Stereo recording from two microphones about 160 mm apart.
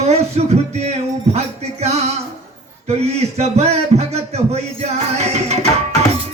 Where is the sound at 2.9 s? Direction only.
40° right (ahead or behind).